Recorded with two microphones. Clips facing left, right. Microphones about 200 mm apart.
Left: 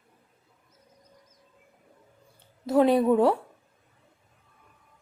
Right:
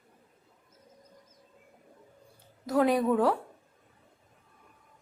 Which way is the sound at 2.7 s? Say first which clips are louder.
Left 4 dB; 25° left (ahead or behind).